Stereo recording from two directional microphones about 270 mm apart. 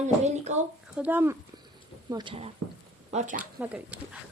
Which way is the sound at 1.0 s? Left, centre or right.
Centre.